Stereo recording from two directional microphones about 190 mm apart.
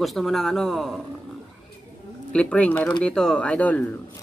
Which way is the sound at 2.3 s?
5° left (ahead or behind).